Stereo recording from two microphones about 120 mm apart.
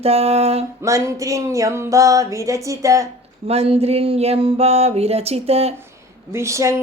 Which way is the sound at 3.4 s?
55° right (ahead or behind).